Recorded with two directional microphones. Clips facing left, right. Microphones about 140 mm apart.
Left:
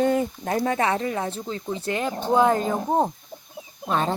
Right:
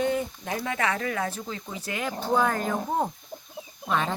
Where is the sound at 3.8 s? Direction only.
35° left (ahead or behind).